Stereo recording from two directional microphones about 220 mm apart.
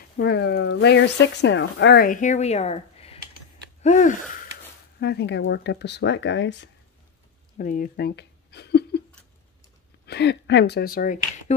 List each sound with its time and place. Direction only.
0.2 s speech: 50° left (ahead or behind); by 4.1 s 30° left (ahead or behind)
5.0 s speech: 50° left (ahead or behind)
7.5 s a sound: 40° left (ahead or behind)
10.0 s speech: 50° left (ahead or behind)